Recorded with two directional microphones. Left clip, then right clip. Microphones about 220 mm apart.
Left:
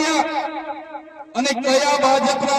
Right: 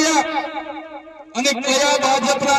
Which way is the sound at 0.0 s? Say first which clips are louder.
Right 2 dB; 55° right (ahead or behind).